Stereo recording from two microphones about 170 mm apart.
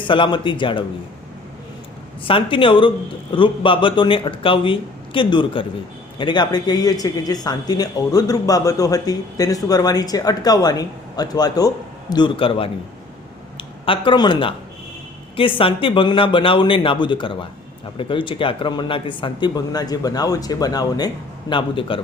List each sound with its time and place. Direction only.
0.0 s speech: 30° left (ahead or behind)
2.2 s speech: 30° left (ahead or behind)